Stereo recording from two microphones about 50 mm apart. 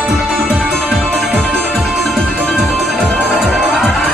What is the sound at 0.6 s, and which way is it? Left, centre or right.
Music, centre.